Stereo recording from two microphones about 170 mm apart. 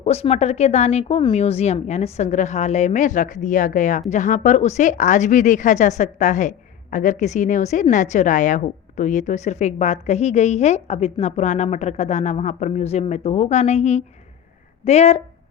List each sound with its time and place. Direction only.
0.0 s a woman's voice: 40° left (ahead or behind)